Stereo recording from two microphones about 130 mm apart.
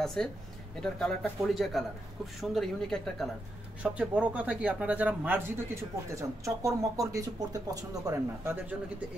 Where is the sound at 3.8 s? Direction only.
10° right (ahead or behind).